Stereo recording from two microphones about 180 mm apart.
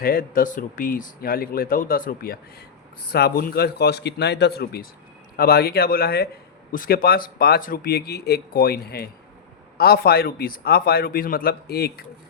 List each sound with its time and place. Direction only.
0.0 s a man's voice: 55° left (ahead or behind)